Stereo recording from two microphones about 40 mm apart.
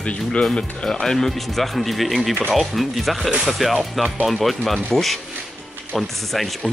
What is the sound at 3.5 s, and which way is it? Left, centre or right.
Speech, centre.